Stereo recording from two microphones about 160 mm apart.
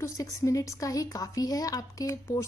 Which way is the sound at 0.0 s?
20° left (ahead or behind).